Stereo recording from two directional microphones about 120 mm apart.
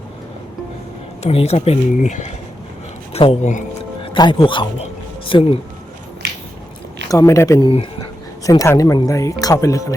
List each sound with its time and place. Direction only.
1.2 s speech: 60° left (ahead or behind); by 2.3 s 80° left
3.1 s speech: 55° left (ahead or behind)
4.0 s speech: 45° left (ahead or behind)
4.8 s a sound: 50° left (ahead or behind)
7.1 s speech: 25° left (ahead or behind)
7.6 s speech: 45° left (ahead or behind)
8.4 s speech: 25° left (ahead or behind)